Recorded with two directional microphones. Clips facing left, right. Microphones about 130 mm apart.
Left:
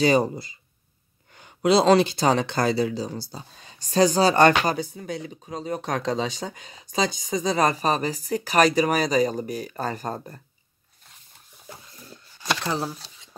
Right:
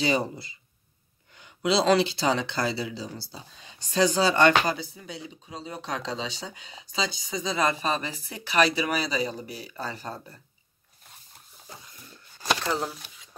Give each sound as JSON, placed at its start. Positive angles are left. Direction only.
{"t": 0.0, "sound": "speech", "side_deg": 45}
{"t": 12.6, "sound": "speech", "side_deg": 20}